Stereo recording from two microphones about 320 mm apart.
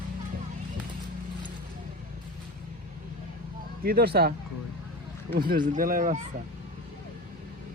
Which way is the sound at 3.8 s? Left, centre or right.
Right.